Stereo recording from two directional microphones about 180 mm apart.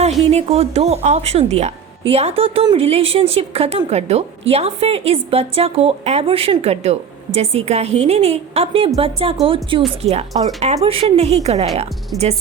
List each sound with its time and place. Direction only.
0.3 s a woman's voice: 35° right (ahead or behind)